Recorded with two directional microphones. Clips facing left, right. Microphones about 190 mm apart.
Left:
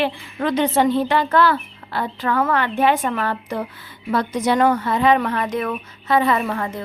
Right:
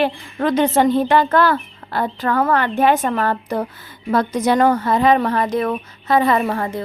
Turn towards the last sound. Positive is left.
turn(degrees=-35)  # may be behind; listen again after turning